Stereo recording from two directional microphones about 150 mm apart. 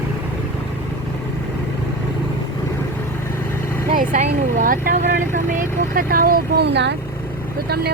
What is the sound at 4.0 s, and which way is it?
Vehicle, 65° right (ahead or behind).